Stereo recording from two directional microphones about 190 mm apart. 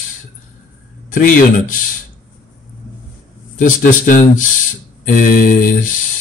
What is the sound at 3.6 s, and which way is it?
Speech, 45° left (ahead or behind).